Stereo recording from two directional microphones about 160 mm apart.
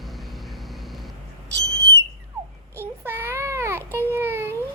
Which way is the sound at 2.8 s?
15° right (ahead or behind).